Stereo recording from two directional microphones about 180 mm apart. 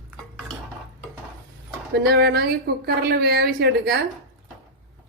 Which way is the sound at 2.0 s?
60° right (ahead or behind).